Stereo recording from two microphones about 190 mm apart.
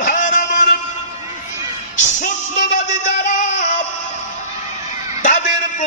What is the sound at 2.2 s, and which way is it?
Music, 40° left (ahead or behind).